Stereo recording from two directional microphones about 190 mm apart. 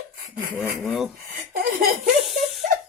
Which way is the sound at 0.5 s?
5° right (ahead or behind).